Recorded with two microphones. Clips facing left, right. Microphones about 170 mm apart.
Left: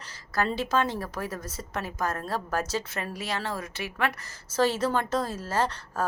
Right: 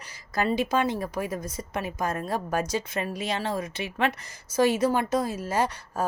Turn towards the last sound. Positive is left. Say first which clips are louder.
# right 1 dB
turn(degrees=-15)  # may be behind; listen again after turning